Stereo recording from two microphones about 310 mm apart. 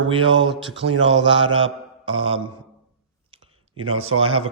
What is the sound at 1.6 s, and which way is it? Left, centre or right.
Mantra, centre.